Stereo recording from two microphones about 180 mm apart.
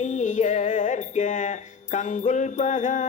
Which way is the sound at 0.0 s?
45° left (ahead or behind).